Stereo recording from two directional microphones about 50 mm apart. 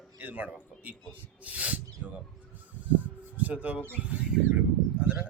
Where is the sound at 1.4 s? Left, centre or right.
Right.